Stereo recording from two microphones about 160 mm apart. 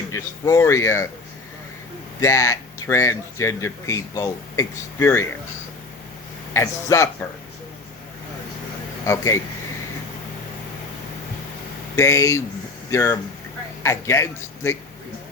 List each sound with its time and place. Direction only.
0.1 s speech: 20° left (ahead or behind)
2.2 s speech: 20° left (ahead or behind)
6.5 s speech: 15° left (ahead or behind)
9.0 s speech: 20° left (ahead or behind)
11.9 s speech: 20° left (ahead or behind)